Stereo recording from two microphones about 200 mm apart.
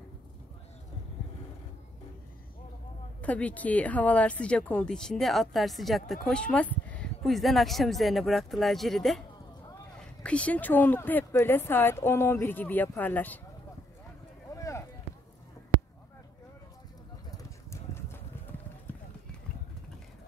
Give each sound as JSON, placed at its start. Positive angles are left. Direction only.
{"t": 3.2, "sound": "speech", "side_deg": 5}
{"t": 14.5, "sound": "a sound", "side_deg": 15}
{"t": 17.4, "sound": "clip-clop", "side_deg": 15}